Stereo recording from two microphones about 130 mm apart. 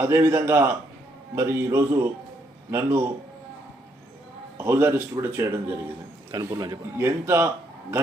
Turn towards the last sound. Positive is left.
turn(degrees=-15)  # may be behind; listen again after turning